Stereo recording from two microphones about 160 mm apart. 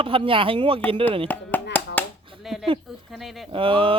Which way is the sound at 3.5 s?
35° right (ahead or behind).